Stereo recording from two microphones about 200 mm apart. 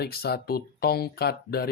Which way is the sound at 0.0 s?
50° left (ahead or behind).